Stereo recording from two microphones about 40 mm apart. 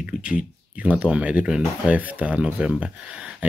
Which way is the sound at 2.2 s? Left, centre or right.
Right.